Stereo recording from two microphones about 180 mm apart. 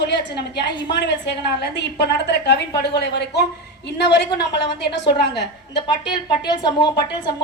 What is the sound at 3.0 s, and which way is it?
A woman's voice, 65° left (ahead or behind).